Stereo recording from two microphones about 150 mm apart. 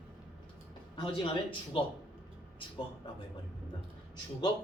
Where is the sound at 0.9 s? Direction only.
35° left (ahead or behind).